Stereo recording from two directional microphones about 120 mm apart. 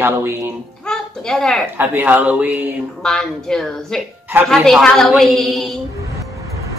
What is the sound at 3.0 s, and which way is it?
A woman's voice, 5° left (ahead or behind).